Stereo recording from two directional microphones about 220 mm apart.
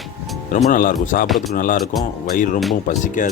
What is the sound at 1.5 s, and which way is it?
Speech, 40° left (ahead or behind).